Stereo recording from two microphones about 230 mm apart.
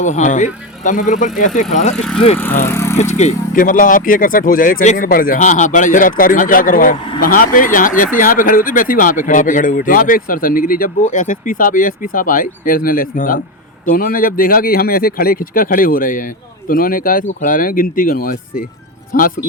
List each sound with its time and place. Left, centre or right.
0.0 s speech: left
2.0 s speech: centre
3.0 s speech: left